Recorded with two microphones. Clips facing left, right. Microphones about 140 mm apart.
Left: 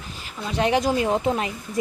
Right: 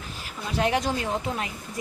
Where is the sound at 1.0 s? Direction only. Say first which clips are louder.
Left 7 dB; 20° left (ahead or behind).